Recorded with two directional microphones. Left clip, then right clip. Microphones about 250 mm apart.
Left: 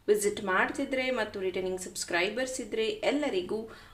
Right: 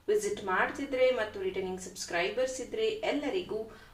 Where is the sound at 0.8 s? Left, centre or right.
Left.